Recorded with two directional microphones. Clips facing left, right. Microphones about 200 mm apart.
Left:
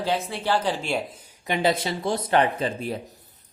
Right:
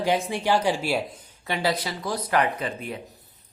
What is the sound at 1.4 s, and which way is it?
Speech, 20° left (ahead or behind).